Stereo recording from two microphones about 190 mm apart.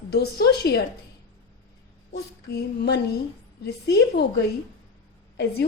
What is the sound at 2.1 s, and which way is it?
A woman's voice, 55° left (ahead or behind).